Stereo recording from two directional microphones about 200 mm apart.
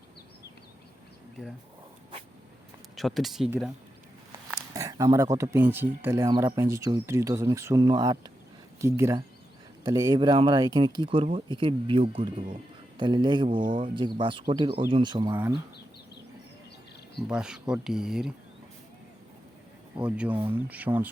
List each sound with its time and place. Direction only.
2.9 s speech: centre (ahead or behind)
4.7 s speech: 15° right (ahead or behind)
17.2 s speech: 5° right (ahead or behind)
20.0 s speech: 5° right (ahead or behind)